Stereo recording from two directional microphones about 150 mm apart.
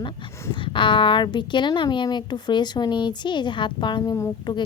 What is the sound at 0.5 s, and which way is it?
A woman's voice, 35° left (ahead or behind).